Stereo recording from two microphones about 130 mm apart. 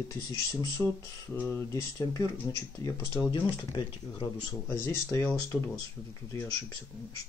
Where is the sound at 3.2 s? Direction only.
35° left (ahead or behind).